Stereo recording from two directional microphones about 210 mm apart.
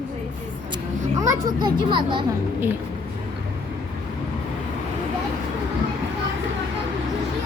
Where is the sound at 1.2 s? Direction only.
20° right (ahead or behind).